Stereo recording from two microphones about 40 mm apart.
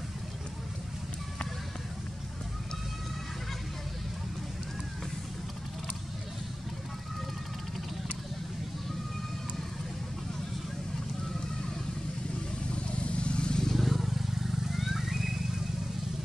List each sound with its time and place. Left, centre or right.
12.7 s vehicle: left
13.7 s vehicle: centre